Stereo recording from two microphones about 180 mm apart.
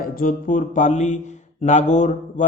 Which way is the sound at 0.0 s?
50° left (ahead or behind).